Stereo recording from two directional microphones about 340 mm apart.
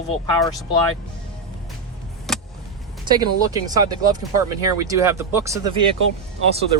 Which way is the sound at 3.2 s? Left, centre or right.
Centre.